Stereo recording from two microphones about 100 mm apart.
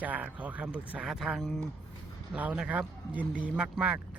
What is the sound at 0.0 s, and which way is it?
Speech, 15° right (ahead or behind).